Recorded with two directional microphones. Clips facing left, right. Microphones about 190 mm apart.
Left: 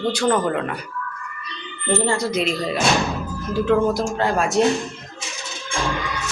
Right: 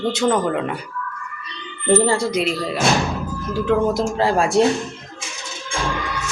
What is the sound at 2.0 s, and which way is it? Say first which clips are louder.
Speech: right 3 dB; 35° right (ahead or behind).